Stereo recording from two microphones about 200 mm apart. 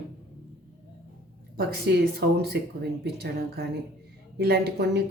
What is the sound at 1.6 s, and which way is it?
Speech, 50° right (ahead or behind).